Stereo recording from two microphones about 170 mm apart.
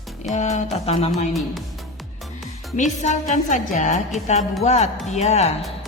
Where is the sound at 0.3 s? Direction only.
45° left (ahead or behind).